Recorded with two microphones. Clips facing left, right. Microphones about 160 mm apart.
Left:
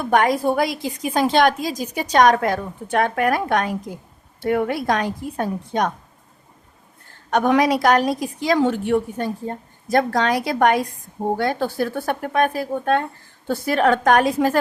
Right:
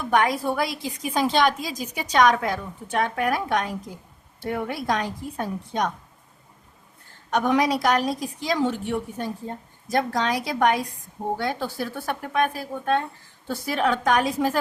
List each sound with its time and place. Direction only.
0.0 s a woman's voice: 50° left (ahead or behind)
7.3 s a woman's voice: 60° left (ahead or behind)